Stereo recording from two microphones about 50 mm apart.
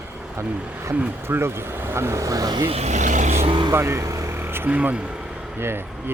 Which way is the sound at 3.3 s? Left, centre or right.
Right.